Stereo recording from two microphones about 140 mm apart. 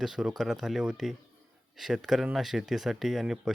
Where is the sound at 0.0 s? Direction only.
5° right (ahead or behind).